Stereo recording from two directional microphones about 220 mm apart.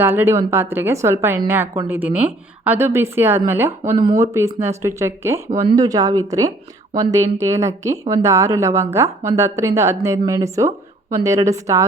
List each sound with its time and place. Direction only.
0.0 s a woman's voice: 10° right (ahead or behind)